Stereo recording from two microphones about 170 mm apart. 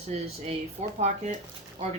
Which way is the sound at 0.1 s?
40° right (ahead or behind).